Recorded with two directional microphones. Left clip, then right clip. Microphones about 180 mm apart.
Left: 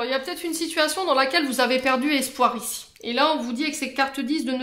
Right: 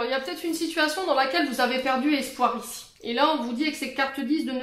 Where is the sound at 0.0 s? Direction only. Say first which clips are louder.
Left 1 dB; 25° left (ahead or behind).